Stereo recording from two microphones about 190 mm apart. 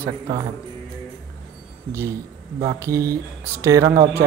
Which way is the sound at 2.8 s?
15° right (ahead or behind).